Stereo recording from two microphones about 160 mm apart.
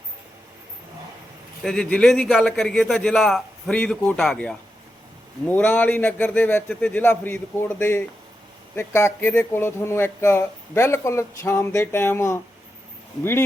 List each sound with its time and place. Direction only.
1.6 s a man's voice: 5° left (ahead or behind)